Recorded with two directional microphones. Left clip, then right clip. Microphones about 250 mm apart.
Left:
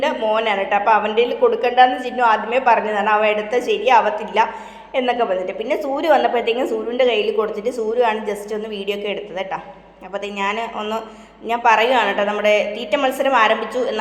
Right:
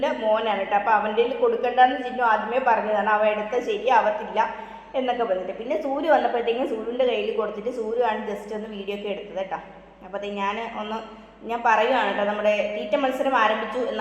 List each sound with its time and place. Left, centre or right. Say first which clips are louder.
0.0 s a woman's voice: left 4 dB; left